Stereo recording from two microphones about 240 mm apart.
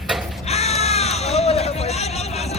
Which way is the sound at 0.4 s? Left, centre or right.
Left.